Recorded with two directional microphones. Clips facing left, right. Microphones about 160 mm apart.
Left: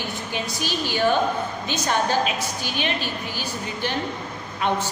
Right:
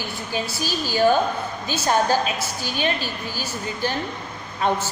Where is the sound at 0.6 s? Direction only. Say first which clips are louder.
Right 1 dB; 40° right (ahead or behind).